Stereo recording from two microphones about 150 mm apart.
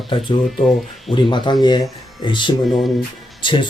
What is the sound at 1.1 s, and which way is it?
Speech, 30° left (ahead or behind).